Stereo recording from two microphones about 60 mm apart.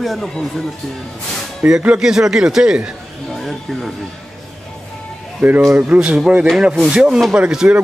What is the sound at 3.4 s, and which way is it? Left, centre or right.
Speech, centre.